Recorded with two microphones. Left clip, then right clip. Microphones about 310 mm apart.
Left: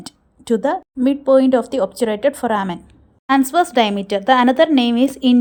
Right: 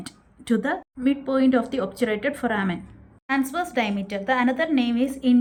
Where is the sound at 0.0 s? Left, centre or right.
Centre.